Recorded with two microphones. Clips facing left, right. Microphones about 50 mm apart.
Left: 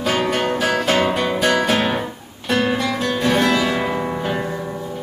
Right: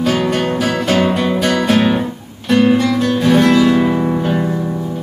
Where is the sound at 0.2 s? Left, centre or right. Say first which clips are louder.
Right 3 dB; centre.